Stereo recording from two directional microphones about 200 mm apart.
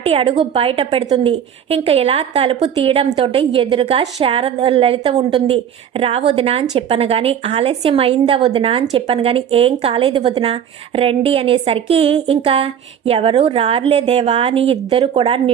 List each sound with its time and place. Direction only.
0.0 s a woman's voice: 25° right (ahead or behind)